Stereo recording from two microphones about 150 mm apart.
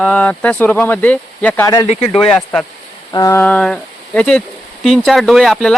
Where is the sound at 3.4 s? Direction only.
5° left (ahead or behind).